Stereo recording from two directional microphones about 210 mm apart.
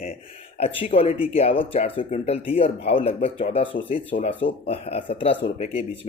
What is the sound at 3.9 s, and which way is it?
Speech, 40° left (ahead or behind).